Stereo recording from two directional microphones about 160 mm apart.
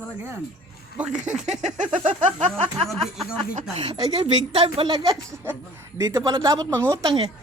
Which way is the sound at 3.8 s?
30° right (ahead or behind).